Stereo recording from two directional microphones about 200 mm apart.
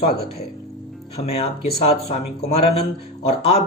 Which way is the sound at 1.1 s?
30° left (ahead or behind).